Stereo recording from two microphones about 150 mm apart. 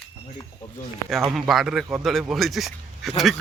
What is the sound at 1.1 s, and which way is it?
Speech, centre (ahead or behind).